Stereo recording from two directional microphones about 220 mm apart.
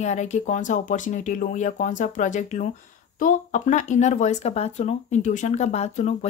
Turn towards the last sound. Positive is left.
turn(degrees=30)  # may be behind; listen again after turning